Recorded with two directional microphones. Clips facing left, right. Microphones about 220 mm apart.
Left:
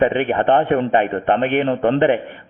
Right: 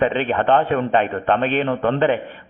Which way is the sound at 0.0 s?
15° left (ahead or behind).